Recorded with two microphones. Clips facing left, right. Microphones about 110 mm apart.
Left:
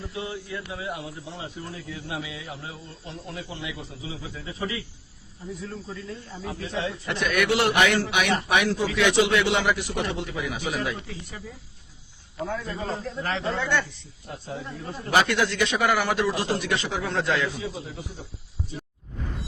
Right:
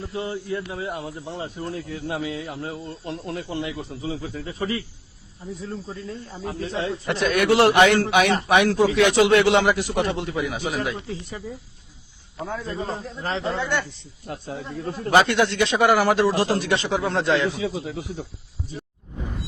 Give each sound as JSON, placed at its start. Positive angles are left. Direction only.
{"t": 0.1, "sound": "speech", "side_deg": -35}
{"t": 5.9, "sound": "speech", "side_deg": -35}
{"t": 6.4, "sound": "speech", "side_deg": -50}
{"t": 7.0, "sound": "speech", "side_deg": -35}
{"t": 12.6, "sound": "a man's voice", "side_deg": -25}
{"t": 14.3, "sound": "speech", "side_deg": -65}
{"t": 15.1, "sound": "a man's voice", "side_deg": -30}
{"t": 16.6, "sound": "a man's voice", "side_deg": -30}
{"t": 17.5, "sound": "speech", "side_deg": -90}